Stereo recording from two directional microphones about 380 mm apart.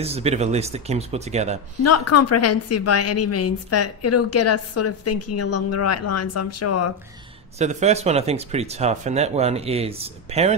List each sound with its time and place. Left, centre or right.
0.0 s speech: centre
1.8 s a woman's voice: left
7.5 s speech: centre